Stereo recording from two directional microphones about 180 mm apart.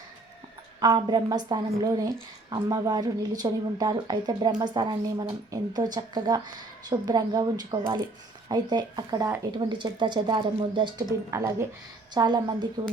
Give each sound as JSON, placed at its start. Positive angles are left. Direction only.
{"t": 0.8, "sound": "a woman's voice", "side_deg": -25}